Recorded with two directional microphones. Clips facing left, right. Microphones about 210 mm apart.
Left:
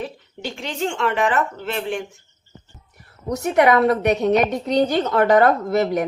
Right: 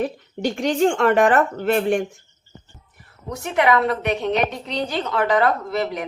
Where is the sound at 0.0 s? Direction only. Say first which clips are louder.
Right 7 dB; 45° right (ahead or behind).